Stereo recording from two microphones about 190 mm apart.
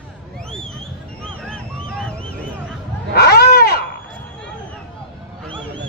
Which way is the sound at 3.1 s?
60° left (ahead or behind).